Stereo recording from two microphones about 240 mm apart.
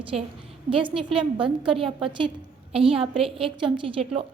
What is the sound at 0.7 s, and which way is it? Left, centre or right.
A woman's voice, right.